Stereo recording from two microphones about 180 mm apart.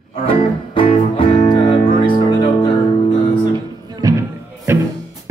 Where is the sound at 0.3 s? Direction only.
30° left (ahead or behind).